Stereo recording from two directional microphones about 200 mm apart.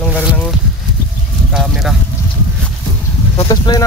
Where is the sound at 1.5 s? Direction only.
Centre (ahead or behind).